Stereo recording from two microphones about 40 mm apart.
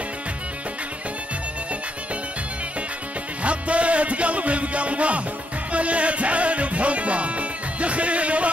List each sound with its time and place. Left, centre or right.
3.4 s music: right